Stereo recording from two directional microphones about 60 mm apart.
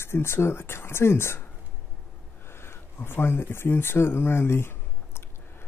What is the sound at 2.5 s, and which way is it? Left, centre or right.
Speech, left.